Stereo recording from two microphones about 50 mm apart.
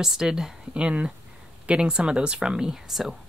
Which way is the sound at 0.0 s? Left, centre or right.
Centre.